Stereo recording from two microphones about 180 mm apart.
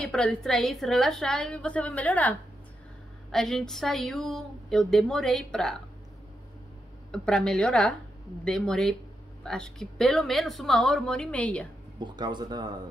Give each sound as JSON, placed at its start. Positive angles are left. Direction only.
{"t": 0.0, "sound": "a woman's voice", "side_deg": 5}
{"t": 7.1, "sound": "a woman's voice", "side_deg": 5}
{"t": 12.0, "sound": "speech", "side_deg": -25}